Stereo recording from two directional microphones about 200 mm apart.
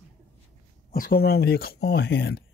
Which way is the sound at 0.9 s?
50° left (ahead or behind).